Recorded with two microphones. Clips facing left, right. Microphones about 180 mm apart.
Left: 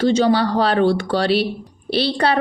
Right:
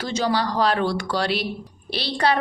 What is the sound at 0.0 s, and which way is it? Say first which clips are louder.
A woman's voice: left 8 dB; 30° left (ahead or behind).